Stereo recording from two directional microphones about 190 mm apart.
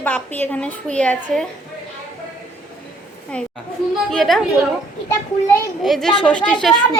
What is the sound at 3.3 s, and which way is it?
A woman's voice, 5° left (ahead or behind).